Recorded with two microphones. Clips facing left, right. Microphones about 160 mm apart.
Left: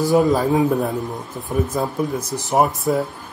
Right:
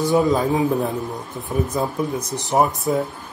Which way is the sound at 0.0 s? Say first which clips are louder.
Left 2 dB; centre (ahead or behind).